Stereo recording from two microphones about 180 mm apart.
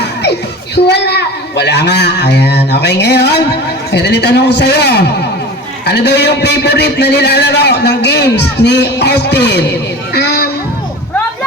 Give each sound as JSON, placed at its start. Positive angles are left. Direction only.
{"t": 0.0, "sound": "music", "side_deg": 70}
{"t": 0.9, "sound": "speech", "side_deg": 70}
{"t": 10.2, "sound": "child singing", "side_deg": 65}